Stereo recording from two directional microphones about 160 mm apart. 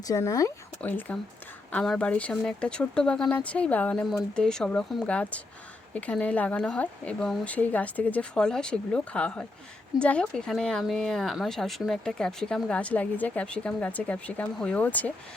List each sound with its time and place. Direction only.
0.1 s speech: 20° left (ahead or behind)